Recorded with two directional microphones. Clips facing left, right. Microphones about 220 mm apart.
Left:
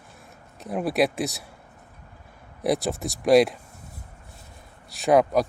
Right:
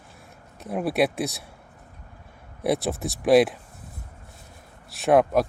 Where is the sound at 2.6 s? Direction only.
Centre (ahead or behind).